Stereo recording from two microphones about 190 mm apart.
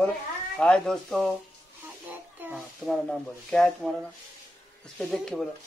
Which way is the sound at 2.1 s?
10° right (ahead or behind).